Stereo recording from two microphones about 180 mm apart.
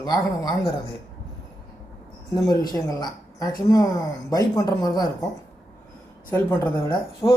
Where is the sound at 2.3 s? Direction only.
20° left (ahead or behind).